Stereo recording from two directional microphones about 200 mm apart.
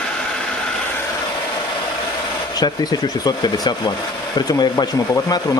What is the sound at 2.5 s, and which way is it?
Speech, 20° left (ahead or behind).